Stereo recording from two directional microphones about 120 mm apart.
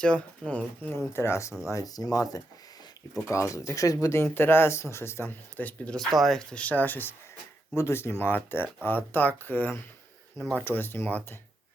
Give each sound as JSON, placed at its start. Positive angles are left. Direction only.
{"t": 0.0, "sound": "speech", "side_deg": 10}
{"t": 10.6, "sound": "speech", "side_deg": 20}